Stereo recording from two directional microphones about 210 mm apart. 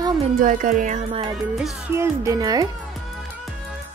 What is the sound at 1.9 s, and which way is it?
Speech, 15° right (ahead or behind).